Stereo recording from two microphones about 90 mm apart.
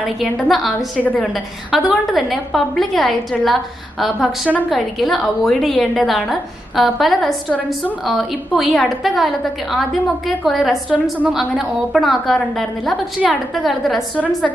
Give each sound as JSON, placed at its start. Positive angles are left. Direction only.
{"t": 0.5, "sound": "a woman's voice", "side_deg": 0}
{"t": 1.0, "sound": "a woman's voice", "side_deg": 15}
{"t": 1.7, "sound": "a woman's voice", "side_deg": -5}
{"t": 4.6, "sound": "a woman's voice", "side_deg": 0}